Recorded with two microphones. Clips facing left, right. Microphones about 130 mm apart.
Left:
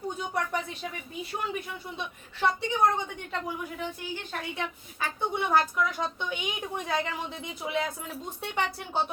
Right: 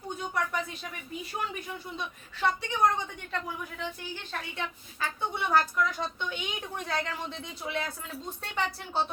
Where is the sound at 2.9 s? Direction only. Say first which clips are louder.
Left 2 dB; 15° left (ahead or behind).